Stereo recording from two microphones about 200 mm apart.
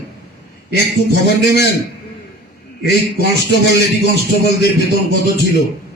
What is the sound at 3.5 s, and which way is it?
A man's voice, 55° left (ahead or behind).